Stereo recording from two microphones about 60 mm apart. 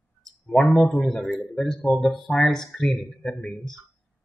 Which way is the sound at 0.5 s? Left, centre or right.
Centre.